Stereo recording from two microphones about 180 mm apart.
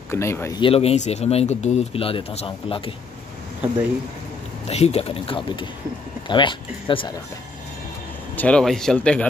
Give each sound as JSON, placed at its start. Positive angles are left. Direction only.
{"t": 0.1, "sound": "speech", "side_deg": 15}
{"t": 0.6, "sound": "speech", "side_deg": 30}
{"t": 4.6, "sound": "speech", "side_deg": 35}
{"t": 8.4, "sound": "speech", "side_deg": 5}